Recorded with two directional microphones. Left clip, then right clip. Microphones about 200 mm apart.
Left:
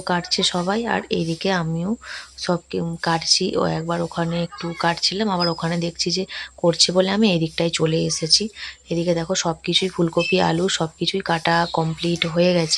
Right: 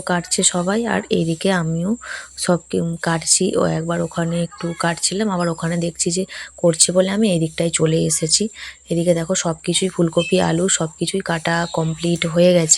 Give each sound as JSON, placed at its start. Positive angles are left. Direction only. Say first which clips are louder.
{"t": 0.1, "sound": "speech", "louder": "right 1 dB", "side_deg": -15}